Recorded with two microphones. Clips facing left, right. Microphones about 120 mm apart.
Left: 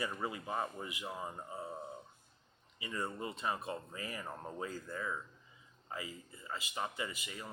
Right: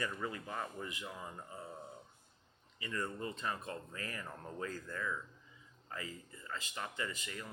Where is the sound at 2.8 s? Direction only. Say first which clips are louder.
Even; 15° left (ahead or behind).